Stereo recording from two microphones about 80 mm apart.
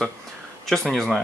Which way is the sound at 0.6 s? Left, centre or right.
Centre.